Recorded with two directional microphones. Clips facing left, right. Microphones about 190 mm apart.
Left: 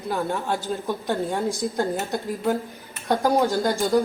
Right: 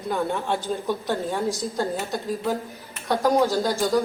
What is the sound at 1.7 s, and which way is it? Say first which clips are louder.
Speech: left 1 dB; 15° left (ahead or behind).